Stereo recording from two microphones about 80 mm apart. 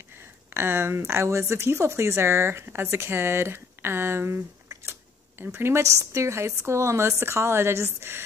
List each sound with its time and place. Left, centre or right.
0.6 s speech: right
5.4 s speech: right